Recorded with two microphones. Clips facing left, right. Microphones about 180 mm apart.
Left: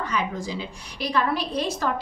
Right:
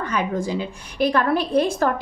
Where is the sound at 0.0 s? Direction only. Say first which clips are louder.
Right 4 dB; 55° right (ahead or behind).